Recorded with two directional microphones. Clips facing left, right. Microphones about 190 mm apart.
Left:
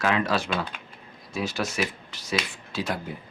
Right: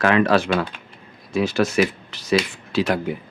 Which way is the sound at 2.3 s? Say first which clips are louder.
Right 9 dB; 75° right (ahead or behind).